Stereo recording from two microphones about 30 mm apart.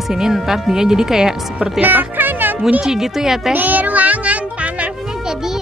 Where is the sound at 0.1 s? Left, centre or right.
Centre.